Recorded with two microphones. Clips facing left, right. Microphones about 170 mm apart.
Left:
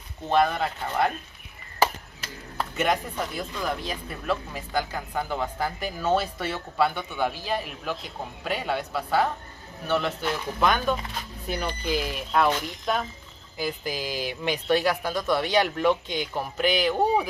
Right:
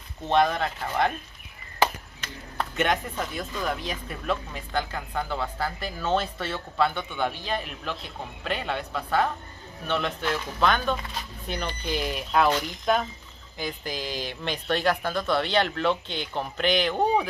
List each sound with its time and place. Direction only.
0.3 s speech: 5° left (ahead or behind)
2.5 s speech: centre (ahead or behind)